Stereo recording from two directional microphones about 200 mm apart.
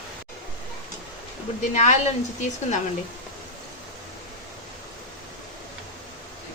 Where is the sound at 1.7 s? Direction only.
35° left (ahead or behind).